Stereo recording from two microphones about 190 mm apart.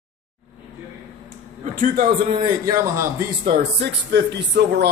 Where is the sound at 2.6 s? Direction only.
15° right (ahead or behind).